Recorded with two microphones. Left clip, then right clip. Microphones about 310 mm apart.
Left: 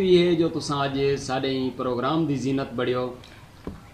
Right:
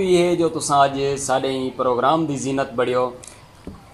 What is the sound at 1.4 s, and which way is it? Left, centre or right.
Speech, right.